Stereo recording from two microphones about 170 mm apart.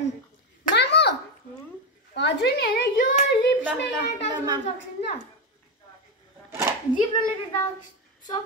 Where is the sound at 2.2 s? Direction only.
85° left; by 3.1 s 70° left (ahead or behind).